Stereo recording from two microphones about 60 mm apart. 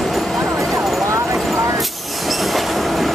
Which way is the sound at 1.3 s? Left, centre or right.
Centre.